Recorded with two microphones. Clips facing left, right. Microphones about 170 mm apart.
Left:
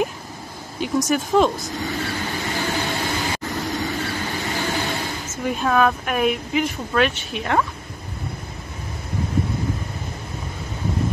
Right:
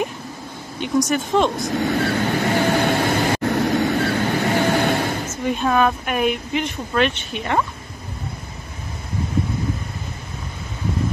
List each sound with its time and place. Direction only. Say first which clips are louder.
0.7 s speech: right 1 dB; centre (ahead or behind)
1.6 s vehicle: right 7 dB; 65° right (ahead or behind)
5.4 s speech: even; centre (ahead or behind)